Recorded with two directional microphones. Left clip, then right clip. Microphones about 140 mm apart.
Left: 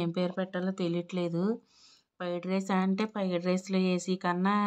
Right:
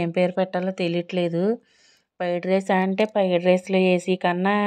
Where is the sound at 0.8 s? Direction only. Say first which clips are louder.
Right 8 dB; 20° right (ahead or behind).